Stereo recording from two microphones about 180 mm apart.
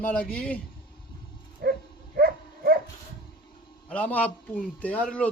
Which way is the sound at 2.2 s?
55° right (ahead or behind).